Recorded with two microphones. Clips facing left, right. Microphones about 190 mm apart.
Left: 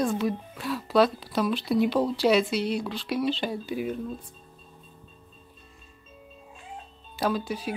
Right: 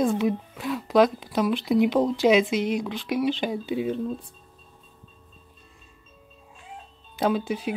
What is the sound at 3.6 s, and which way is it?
Speech, 25° right (ahead or behind).